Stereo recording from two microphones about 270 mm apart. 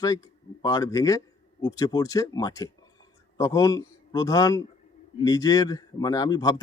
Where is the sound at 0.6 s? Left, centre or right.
Centre.